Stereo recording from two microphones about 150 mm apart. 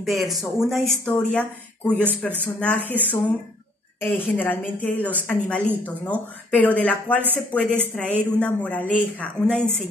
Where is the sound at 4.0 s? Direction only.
15° left (ahead or behind).